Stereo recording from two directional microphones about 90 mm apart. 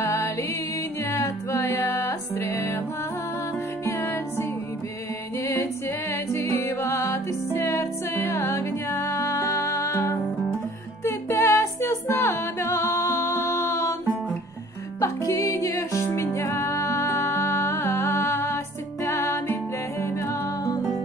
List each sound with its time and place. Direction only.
0.0 s music: 30° left (ahead or behind)
3.8 s music: 25° left (ahead or behind)
6.3 s music: 30° left (ahead or behind)
15.0 s music: 35° left (ahead or behind)